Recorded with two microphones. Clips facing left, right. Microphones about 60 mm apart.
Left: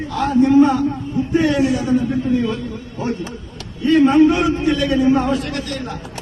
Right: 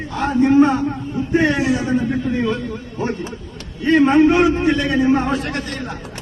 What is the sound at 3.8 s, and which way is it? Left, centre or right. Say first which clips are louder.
A man's voice: left 1 dB; right.